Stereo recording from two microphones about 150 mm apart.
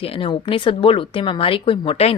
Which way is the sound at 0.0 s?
35° left (ahead or behind).